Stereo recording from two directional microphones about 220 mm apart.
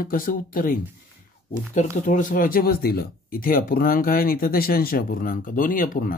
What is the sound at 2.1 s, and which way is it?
Speech, 35° left (ahead or behind).